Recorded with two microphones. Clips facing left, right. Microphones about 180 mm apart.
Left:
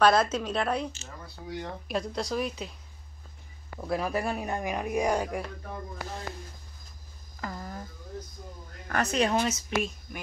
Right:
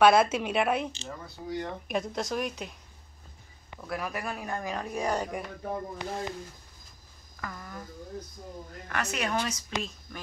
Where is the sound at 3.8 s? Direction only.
30° left (ahead or behind); by 5.3 s 10° left (ahead or behind).